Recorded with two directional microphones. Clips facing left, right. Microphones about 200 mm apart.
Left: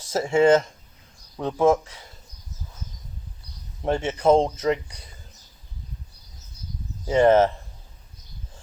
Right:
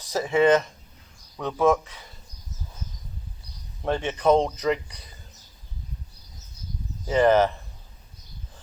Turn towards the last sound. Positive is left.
turn(degrees=25)  # may be behind; listen again after turning